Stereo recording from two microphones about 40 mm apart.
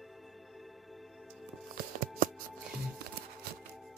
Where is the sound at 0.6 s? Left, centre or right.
Centre.